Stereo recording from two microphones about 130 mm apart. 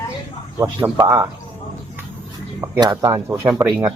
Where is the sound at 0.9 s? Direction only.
25° right (ahead or behind).